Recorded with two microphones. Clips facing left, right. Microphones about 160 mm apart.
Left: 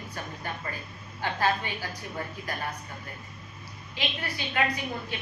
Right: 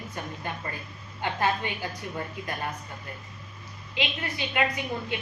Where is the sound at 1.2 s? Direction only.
20° right (ahead or behind).